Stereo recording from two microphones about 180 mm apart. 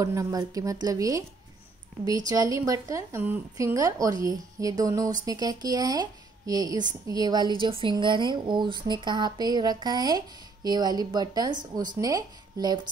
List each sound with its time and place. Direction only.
0.0 s a woman's voice: 15° right (ahead or behind)
2.2 s a woman's voice: 20° right (ahead or behind)